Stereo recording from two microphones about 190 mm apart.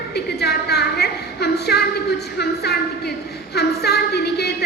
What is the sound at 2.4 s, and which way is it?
Speech, 60° left (ahead or behind).